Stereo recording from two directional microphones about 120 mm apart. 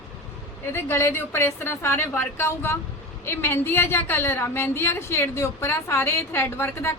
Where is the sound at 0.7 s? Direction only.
20° left (ahead or behind).